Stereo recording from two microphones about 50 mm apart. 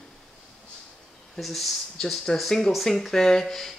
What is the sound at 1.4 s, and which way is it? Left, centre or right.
Speech, centre.